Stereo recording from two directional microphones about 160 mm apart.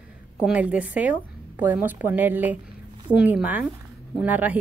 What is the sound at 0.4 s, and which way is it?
A woman's voice, 5° right (ahead or behind).